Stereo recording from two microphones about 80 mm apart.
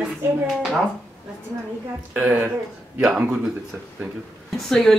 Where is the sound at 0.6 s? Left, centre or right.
Centre.